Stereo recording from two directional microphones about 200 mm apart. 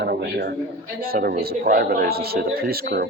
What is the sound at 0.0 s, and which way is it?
A man's voice, 55° right (ahead or behind).